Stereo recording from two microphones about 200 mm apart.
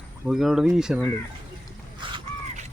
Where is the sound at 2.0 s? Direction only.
25° right (ahead or behind).